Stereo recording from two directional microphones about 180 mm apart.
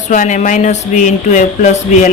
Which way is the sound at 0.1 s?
45° left (ahead or behind).